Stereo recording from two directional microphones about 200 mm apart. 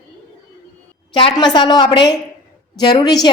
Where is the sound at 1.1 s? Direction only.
25° left (ahead or behind).